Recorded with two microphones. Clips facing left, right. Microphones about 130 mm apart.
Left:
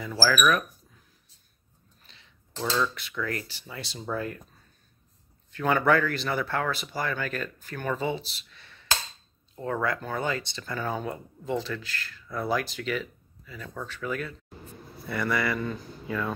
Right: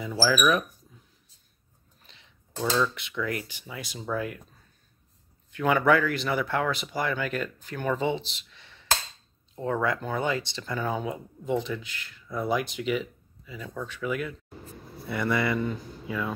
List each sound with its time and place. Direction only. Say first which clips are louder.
0.0 s speech: right 1 dB; 15° right (ahead or behind)
2.1 s a sound: right 1 dB; 20° right (ahead or behind)
2.9 s speech: right 1 dB; 20° right (ahead or behind)
5.5 s speech: right 1 dB; 15° right (ahead or behind)